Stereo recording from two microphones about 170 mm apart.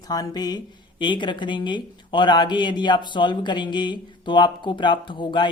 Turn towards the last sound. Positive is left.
turn(degrees=25)  # may be behind; listen again after turning